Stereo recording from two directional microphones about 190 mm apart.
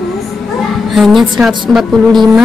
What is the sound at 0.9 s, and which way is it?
A woman's voice, centre (ahead or behind).